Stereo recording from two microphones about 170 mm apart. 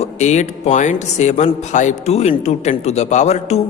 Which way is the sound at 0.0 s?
45° left (ahead or behind).